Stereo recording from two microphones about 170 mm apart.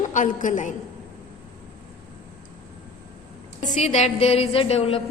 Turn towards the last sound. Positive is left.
turn(degrees=35)  # may be behind; listen again after turning